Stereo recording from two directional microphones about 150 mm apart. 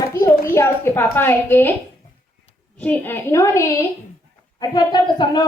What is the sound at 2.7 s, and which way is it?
Speech, 10° left (ahead or behind).